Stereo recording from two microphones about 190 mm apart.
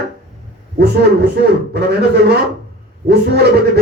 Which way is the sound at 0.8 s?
60° right (ahead or behind).